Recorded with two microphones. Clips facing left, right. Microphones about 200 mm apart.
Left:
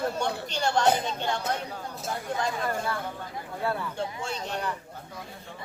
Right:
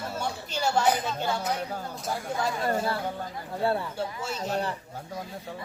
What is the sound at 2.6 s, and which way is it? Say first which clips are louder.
Speech: right 3 dB; 30° right (ahead or behind).